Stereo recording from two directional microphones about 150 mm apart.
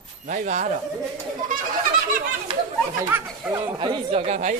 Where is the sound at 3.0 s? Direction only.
15° right (ahead or behind).